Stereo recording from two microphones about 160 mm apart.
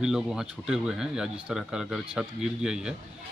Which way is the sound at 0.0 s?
5° right (ahead or behind).